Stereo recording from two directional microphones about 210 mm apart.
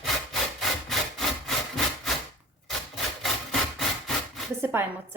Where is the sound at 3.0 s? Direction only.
Centre (ahead or behind).